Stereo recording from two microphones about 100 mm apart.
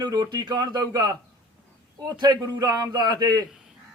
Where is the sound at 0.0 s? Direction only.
40° right (ahead or behind).